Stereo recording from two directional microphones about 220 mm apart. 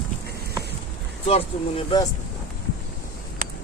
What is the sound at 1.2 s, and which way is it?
Speech, 25° left (ahead or behind).